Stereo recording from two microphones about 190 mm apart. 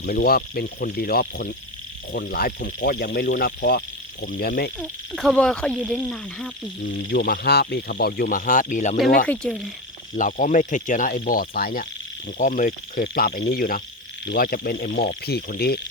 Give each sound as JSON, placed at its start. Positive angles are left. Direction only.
{"t": 0.0, "sound": "speech", "side_deg": 50}
{"t": 4.8, "sound": "speech", "side_deg": 5}
{"t": 7.1, "sound": "speech", "side_deg": 55}
{"t": 9.2, "sound": "frog", "side_deg": 5}
{"t": 10.2, "sound": "speech", "side_deg": 45}